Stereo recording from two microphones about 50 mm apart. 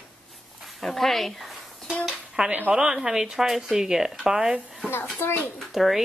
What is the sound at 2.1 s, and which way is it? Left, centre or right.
Dishes, centre.